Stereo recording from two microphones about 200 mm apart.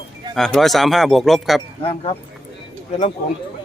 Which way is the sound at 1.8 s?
30° left (ahead or behind).